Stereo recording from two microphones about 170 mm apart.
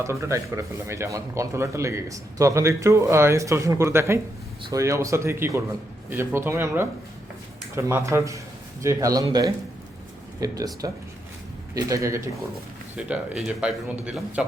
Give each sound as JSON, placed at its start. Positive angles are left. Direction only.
{"t": 0.0, "sound": "speech", "side_deg": -15}
{"t": 13.0, "sound": "speech", "side_deg": -5}